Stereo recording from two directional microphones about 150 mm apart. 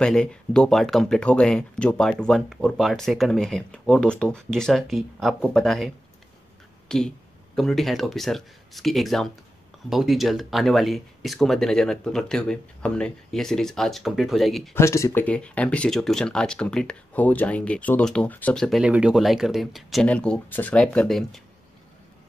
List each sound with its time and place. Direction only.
0.0 s speech: 5° left (ahead or behind)
6.9 s speech: 5° left (ahead or behind)
14.7 s speech: 20° left (ahead or behind)
15.2 s speech: 10° left (ahead or behind)
18.8 s speech: 5° right (ahead or behind)